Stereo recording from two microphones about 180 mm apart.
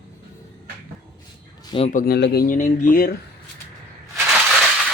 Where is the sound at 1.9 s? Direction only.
60° left (ahead or behind).